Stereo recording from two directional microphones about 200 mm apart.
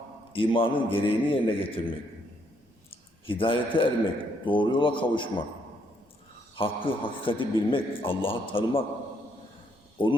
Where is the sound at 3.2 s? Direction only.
25° left (ahead or behind).